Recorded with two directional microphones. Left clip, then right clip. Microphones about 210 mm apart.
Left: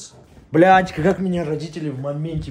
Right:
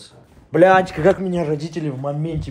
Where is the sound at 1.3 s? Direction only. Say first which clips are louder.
Right 2 dB; 20° right (ahead or behind).